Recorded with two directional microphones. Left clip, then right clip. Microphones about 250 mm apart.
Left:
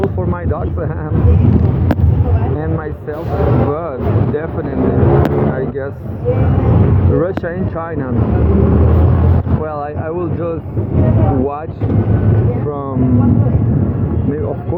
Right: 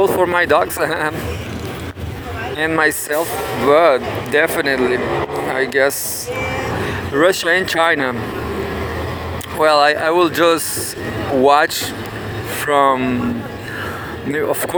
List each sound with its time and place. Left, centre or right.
0.2 s speech: right
3.7 s speech: right
7.2 s speech: right
9.6 s speech: right
12.7 s speech: right